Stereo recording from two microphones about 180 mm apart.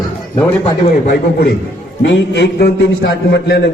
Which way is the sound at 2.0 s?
70° left (ahead or behind).